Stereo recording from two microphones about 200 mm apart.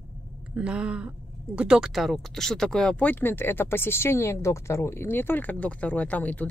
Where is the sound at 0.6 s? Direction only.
5° right (ahead or behind).